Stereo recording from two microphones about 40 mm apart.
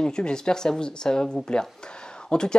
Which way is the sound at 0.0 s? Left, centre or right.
Centre.